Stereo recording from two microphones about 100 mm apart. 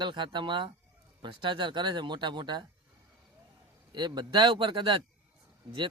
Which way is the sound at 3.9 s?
45° right (ahead or behind).